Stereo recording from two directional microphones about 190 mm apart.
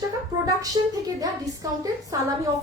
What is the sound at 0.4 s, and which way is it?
A woman's voice, 20° right (ahead or behind).